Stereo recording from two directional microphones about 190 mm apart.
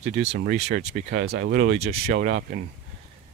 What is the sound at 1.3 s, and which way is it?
Speech, 60° right (ahead or behind).